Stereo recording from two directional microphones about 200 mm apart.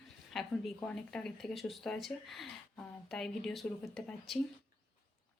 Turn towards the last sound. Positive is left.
turn(degrees=0)  # may be behind; listen again after turning